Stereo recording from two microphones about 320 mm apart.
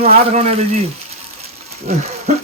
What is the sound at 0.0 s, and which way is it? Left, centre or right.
Speech, centre.